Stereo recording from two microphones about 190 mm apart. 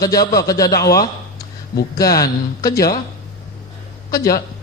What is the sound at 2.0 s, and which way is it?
A man's voice, 20° left (ahead or behind).